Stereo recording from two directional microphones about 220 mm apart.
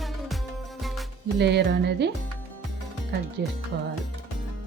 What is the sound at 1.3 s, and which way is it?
Speech, 50° right (ahead or behind).